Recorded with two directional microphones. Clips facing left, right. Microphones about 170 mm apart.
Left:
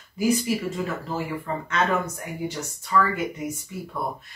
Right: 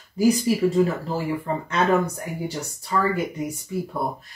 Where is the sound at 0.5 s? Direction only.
35° right (ahead or behind).